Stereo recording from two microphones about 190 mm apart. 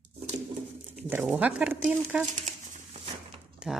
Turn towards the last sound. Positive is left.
turn(degrees=-5)  # may be behind; listen again after turning